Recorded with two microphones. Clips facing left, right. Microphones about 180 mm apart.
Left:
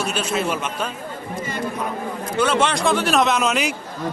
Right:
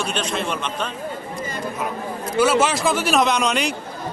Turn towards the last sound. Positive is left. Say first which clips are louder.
# even
turn(degrees=5)  # may be behind; listen again after turning